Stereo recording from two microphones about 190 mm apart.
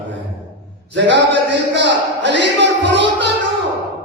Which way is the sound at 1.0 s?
70° right (ahead or behind).